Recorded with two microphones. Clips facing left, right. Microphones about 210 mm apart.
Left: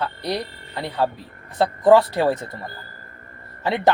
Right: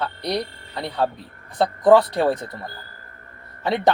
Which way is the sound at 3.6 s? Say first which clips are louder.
Even; 5° left (ahead or behind).